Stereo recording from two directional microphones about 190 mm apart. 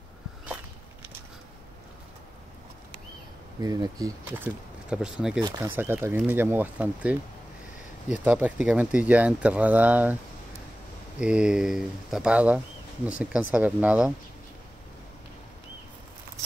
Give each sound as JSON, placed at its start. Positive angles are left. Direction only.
{"t": 3.6, "sound": "speech", "side_deg": -20}
{"t": 4.8, "sound": "speech", "side_deg": -5}
{"t": 11.1, "sound": "speech", "side_deg": -5}